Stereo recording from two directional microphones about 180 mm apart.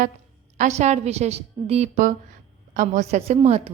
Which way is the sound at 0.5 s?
40° right (ahead or behind).